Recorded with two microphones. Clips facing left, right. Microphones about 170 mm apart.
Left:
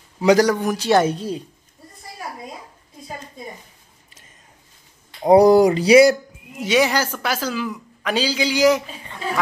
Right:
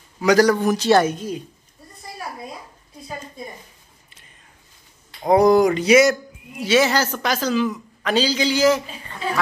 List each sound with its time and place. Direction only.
0.2 s a man's voice: 25° left (ahead or behind)
0.5 s a man's voice: 10° left (ahead or behind)
1.0 s speech: 30° left (ahead or behind)
5.3 s speech: 35° left (ahead or behind)
6.6 s a man's voice: 15° left (ahead or behind)